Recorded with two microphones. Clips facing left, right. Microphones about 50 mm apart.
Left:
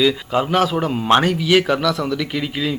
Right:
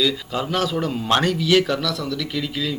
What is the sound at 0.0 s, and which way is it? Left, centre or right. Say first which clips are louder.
A man's voice: left 5 dB; left.